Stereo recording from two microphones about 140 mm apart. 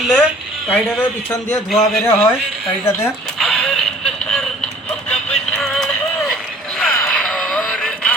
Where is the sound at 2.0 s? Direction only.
15° left (ahead or behind).